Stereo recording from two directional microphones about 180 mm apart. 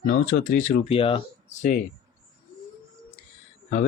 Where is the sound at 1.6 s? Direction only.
50° left (ahead or behind).